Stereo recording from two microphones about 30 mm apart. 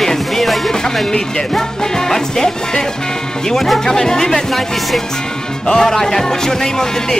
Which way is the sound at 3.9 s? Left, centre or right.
Centre.